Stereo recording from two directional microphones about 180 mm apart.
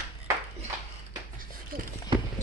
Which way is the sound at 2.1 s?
30° right (ahead or behind).